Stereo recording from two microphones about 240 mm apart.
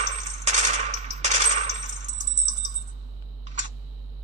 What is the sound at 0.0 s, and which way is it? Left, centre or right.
Coin, right.